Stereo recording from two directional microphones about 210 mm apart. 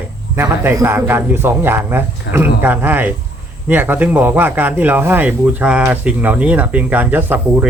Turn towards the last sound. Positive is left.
turn(degrees=-10)  # may be behind; listen again after turning